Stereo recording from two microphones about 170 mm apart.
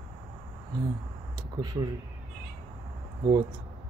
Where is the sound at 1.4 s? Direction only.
20° right (ahead or behind).